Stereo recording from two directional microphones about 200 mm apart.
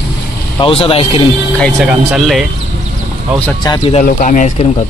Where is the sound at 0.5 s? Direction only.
25° left (ahead or behind).